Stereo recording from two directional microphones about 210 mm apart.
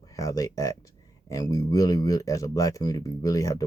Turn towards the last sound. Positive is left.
turn(degrees=15)  # may be behind; listen again after turning